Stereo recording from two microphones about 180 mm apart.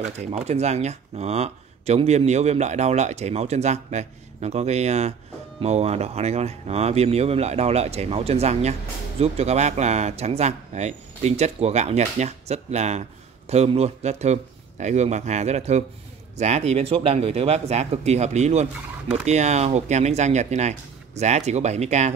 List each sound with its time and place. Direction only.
0.2 s speech: 35° right (ahead or behind)